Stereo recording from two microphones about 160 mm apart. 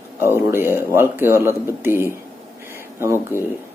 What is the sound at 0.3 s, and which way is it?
Speech, 15° right (ahead or behind).